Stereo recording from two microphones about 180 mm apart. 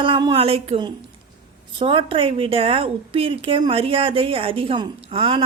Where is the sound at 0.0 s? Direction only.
25° right (ahead or behind).